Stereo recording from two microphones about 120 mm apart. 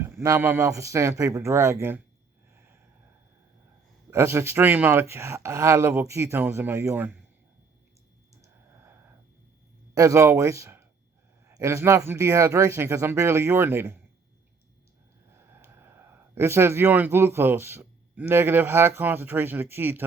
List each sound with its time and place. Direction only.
0.0 s speech: 20° right (ahead or behind)
4.1 s speech: 20° right (ahead or behind)
8.4 s clicking: 20° right (ahead or behind)
9.9 s speech: 30° right (ahead or behind)
15.4 s speech: 20° right (ahead or behind)